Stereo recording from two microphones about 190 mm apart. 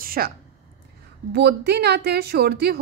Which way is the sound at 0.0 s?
50° right (ahead or behind).